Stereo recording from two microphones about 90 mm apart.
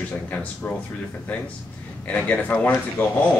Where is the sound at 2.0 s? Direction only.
15° left (ahead or behind).